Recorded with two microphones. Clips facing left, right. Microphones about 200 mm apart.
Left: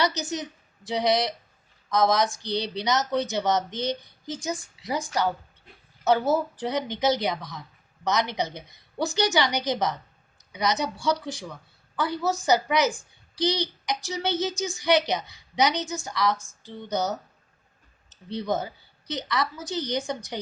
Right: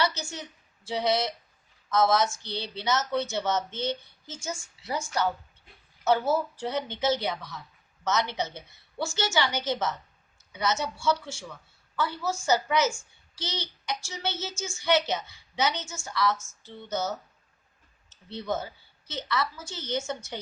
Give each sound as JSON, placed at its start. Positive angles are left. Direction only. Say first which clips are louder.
{"t": 0.0, "sound": "speech", "louder": "left 3 dB", "side_deg": 15}
{"t": 6.6, "sound": "speech", "louder": "left 3 dB", "side_deg": 15}
{"t": 18.1, "sound": "speech", "louder": "left 4 dB", "side_deg": 15}